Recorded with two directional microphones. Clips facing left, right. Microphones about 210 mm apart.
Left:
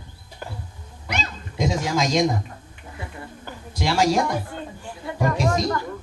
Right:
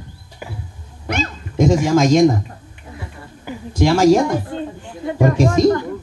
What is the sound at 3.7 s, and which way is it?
Speech, 50° right (ahead or behind).